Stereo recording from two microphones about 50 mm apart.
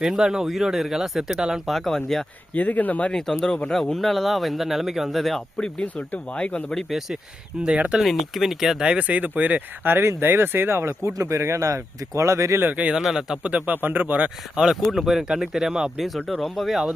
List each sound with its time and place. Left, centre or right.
0.0 s speech: centre
1.6 s speech: centre
2.6 s speech: left
3.1 s speech: centre
5.8 s speech: left
7.6 s speech: right
8.0 s speech: centre
8.8 s speech: right
12.7 s speech: right
13.0 s speech: centre
13.5 s speech: right
13.8 s speech: right
14.5 s speech: centre
16.0 s speech: centre